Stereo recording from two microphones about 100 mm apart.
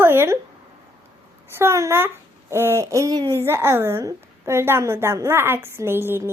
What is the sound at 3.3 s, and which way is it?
A child's voice, 25° right (ahead or behind).